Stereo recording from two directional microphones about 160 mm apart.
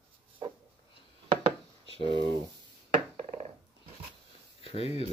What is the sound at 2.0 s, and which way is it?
Speech, 30° right (ahead or behind).